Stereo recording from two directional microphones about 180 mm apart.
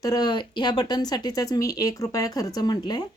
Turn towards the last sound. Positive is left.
turn(degrees=25)  # may be behind; listen again after turning